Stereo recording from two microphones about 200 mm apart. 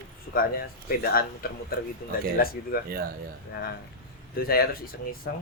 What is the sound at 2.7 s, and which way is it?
Speech, 45° left (ahead or behind).